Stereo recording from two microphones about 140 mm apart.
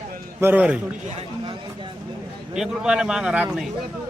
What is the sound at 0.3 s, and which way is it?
Speech, 15° right (ahead or behind).